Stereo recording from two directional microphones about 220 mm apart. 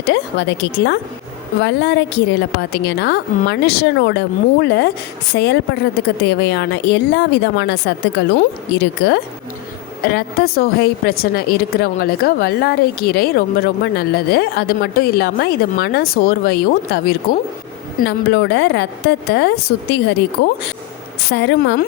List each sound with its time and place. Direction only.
0.0 s a woman's voice: 55° left (ahead or behind)
5.3 s a woman's voice: 60° left (ahead or behind)
6.4 s a woman's voice: 50° left (ahead or behind)